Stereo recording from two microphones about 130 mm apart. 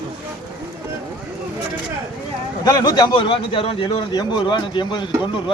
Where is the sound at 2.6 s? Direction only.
30° left (ahead or behind).